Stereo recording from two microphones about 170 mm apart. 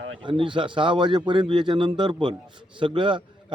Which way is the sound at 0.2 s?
30° right (ahead or behind).